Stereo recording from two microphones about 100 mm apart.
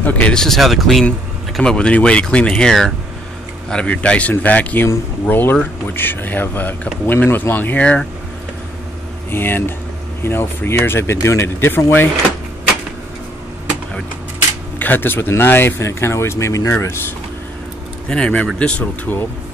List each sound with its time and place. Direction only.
0.0 s speech: 15° left (ahead or behind)
9.3 s speech: 20° left (ahead or behind)
14.8 s speech: 20° left (ahead or behind)
18.0 s speech: 10° left (ahead or behind)